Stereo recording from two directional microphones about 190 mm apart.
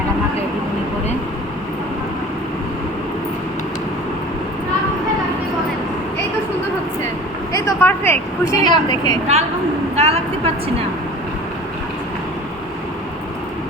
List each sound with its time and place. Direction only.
7.5 s vehicle: 10° left (ahead or behind)
10.0 s a woman's voice: 30° right (ahead or behind)